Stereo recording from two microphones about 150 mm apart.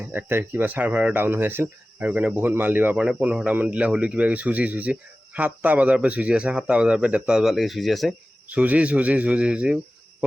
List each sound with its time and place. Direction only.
0.0 s speech: 10° right (ahead or behind)